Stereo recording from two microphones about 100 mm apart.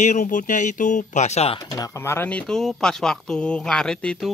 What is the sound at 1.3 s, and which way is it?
Speech, 90° left.